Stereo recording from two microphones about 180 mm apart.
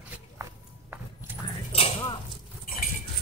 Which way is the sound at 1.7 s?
35° left (ahead or behind).